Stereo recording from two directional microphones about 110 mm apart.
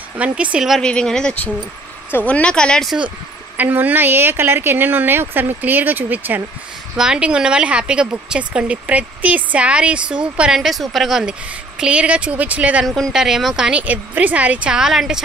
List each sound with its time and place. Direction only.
0.2 s speech: 10° right (ahead or behind)
3.5 s a woman's voice: 15° right (ahead or behind)
12.8 s speech: centre (ahead or behind)